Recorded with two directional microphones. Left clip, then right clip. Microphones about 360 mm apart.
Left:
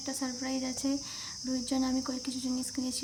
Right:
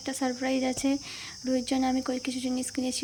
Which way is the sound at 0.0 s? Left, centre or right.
Centre.